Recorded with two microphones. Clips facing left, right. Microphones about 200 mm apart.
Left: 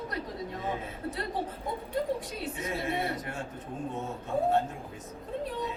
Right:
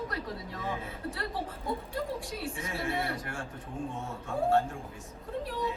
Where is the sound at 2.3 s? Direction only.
20° left (ahead or behind).